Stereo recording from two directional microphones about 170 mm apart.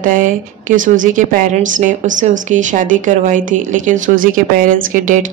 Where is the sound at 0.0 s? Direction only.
50° right (ahead or behind).